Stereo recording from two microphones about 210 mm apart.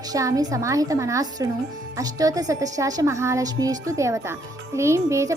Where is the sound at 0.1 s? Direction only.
15° right (ahead or behind).